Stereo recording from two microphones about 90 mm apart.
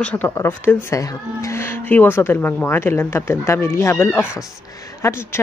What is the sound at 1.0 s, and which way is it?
Speech, 40° left (ahead or behind).